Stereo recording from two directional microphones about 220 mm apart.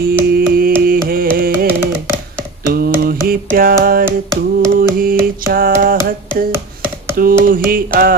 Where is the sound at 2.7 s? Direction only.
45° right (ahead or behind).